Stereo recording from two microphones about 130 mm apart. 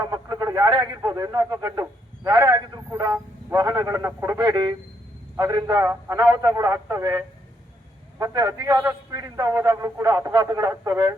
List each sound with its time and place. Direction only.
0.0 s a man's voice: 30° right (ahead or behind)